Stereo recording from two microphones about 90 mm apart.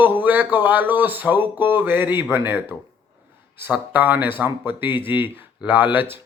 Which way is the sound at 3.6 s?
20° right (ahead or behind).